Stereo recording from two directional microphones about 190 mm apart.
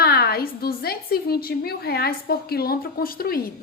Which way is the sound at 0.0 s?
55° left (ahead or behind).